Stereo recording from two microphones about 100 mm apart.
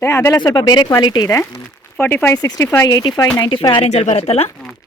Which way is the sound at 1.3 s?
25° left (ahead or behind).